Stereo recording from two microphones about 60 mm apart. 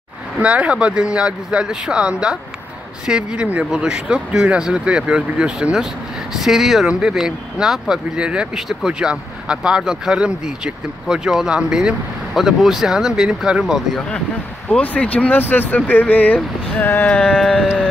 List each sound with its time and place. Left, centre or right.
0.4 s speech: right
8.5 s speech: centre
14.7 s speech: left
17.1 s speech: left
17.4 s sheep: centre